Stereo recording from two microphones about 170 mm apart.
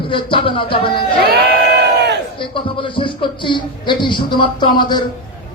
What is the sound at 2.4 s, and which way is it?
A woman's voice, 30° left (ahead or behind).